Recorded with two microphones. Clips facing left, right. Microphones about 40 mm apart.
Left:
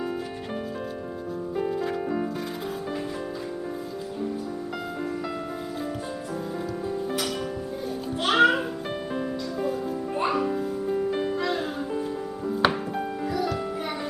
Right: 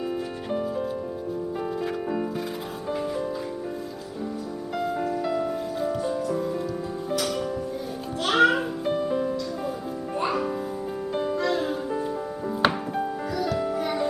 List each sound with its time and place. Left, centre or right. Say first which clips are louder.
0.5 s music: right 7 dB; centre
2.9 s music: right 3 dB; centre
6.0 s music: right 7 dB; centre
7.1 s music: right 2 dB; centre
11.6 s music: right 2 dB; centre